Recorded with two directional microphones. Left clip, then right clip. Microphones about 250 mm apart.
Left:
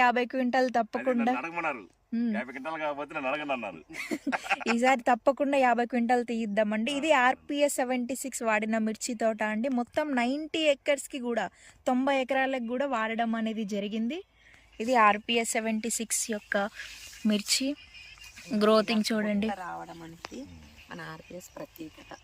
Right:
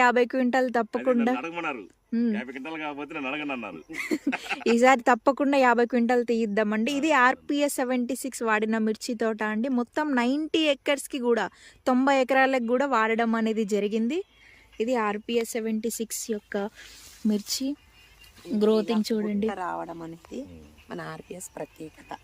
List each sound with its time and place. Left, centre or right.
0.0 s speech: centre
19.5 s speech: right